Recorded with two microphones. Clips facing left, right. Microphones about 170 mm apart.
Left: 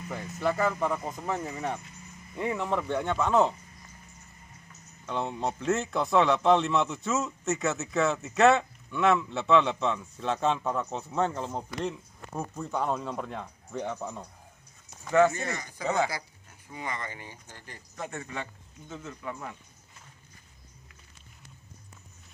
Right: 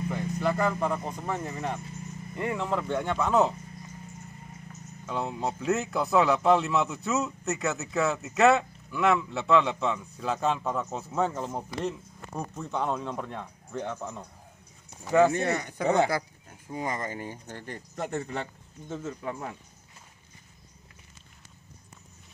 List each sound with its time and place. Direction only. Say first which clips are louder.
0.1 s a man's voice: left 1 dB; centre (ahead or behind)
5.0 s a man's voice: even; centre (ahead or behind)
14.9 s a sound: right 1 dB; 15° right (ahead or behind)
15.3 s speech: right 7 dB; 65° right (ahead or behind)
18.1 s a man's voice: right 8 dB; 35° right (ahead or behind)